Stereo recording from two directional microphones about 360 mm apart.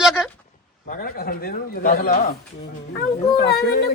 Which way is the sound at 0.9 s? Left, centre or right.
Left.